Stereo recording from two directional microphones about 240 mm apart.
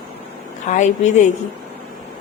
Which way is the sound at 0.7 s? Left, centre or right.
Left.